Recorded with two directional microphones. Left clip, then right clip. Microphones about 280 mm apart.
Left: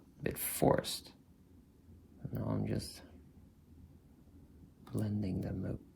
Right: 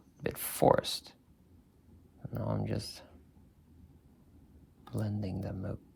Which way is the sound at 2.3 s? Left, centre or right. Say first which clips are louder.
Right 2 dB; right.